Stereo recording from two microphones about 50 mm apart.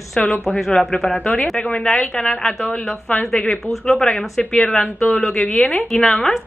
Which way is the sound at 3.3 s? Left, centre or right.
Left.